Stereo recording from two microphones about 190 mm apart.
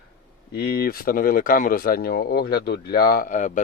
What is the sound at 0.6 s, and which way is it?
A man's voice, 55° left (ahead or behind).